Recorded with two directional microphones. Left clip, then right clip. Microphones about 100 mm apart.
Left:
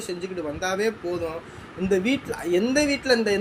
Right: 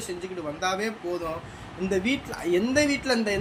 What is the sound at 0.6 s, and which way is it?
Speech, 20° left (ahead or behind).